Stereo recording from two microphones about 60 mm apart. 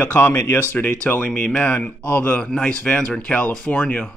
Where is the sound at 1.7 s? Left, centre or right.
Left.